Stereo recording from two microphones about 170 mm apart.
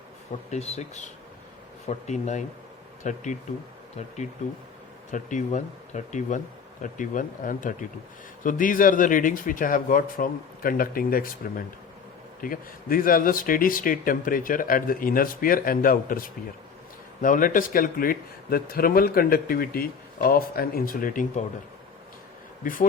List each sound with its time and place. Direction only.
0.5 s speech: 40° left (ahead or behind)
5.1 s speech: 45° left (ahead or behind)
22.6 s speech: 55° left (ahead or behind)